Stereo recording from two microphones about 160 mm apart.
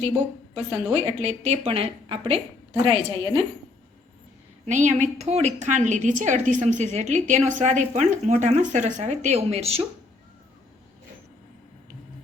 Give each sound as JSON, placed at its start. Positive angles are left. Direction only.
{"t": 0.9, "sound": "a woman's voice", "side_deg": -40}
{"t": 4.6, "sound": "a woman's voice", "side_deg": -50}